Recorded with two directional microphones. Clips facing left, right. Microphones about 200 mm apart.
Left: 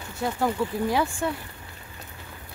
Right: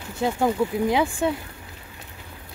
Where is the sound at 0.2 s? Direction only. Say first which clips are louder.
Right 4 dB; 15° right (ahead or behind).